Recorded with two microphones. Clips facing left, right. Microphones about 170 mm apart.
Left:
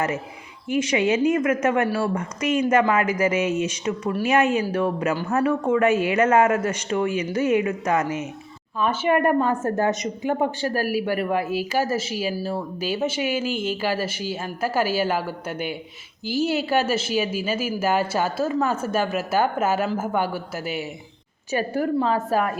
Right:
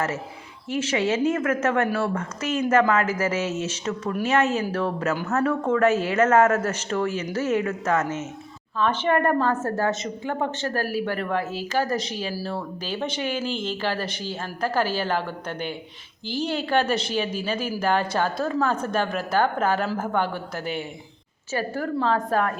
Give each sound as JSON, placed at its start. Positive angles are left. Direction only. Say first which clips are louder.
{"t": 0.7, "sound": "speech", "louder": "left 3 dB", "side_deg": 10}
{"t": 21.5, "sound": "speech", "louder": "left 4 dB", "side_deg": 15}